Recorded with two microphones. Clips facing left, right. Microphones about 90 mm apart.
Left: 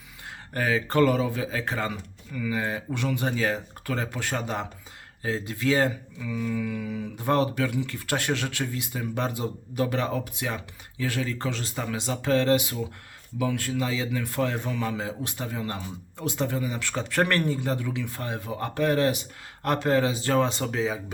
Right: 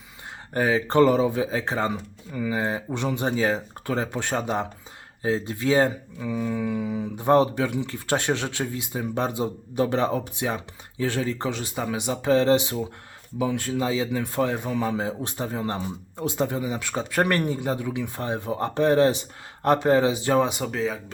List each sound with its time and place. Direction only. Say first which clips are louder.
0.5 s speech: right 4 dB; 20° right (ahead or behind); by 21.0 s centre (ahead or behind)